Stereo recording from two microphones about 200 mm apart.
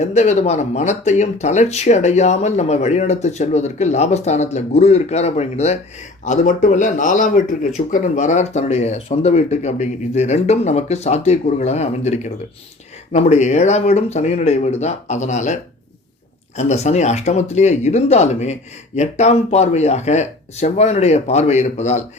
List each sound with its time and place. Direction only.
0.0 s speech: 35° left (ahead or behind)
16.6 s speech: 35° left (ahead or behind)